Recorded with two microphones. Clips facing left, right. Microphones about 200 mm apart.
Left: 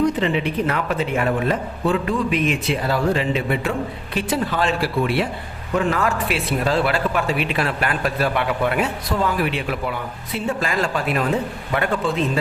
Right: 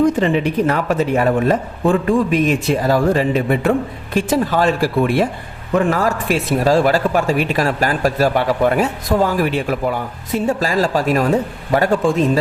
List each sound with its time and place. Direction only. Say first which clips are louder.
0.0 s speech: right 5 dB; 45° right (ahead or behind)